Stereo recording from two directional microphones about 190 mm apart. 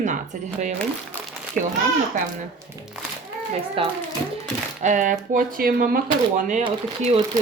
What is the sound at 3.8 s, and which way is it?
Speech, 30° right (ahead or behind).